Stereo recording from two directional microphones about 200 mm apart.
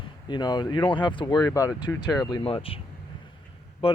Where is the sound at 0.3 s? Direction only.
20° left (ahead or behind).